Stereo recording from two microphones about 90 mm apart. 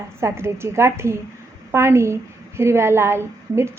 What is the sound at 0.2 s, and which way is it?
A woman's voice, 30° right (ahead or behind).